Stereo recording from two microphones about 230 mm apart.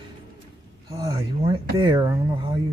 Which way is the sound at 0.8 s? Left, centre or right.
Centre.